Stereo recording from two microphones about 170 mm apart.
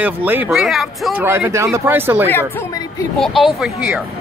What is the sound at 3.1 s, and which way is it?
Speech, centre (ahead or behind).